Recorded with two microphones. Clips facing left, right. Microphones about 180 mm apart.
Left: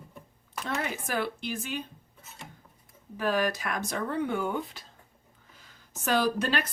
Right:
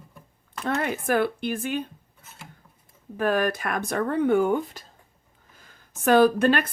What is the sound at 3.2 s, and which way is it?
A woman's voice, 50° right (ahead or behind).